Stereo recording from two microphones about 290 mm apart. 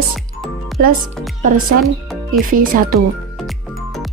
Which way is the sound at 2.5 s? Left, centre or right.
Right.